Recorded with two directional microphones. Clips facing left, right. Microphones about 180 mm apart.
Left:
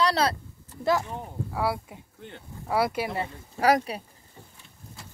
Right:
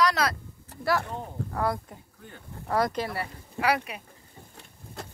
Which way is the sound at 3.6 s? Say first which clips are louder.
Left 4 dB; 35° left (ahead or behind).